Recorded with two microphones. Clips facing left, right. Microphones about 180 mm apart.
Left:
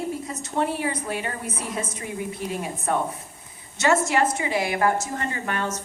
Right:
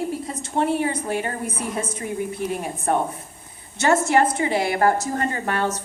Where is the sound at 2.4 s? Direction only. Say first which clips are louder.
Right 4 dB; 55° right (ahead or behind).